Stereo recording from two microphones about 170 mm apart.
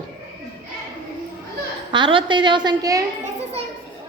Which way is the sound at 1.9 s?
30° right (ahead or behind).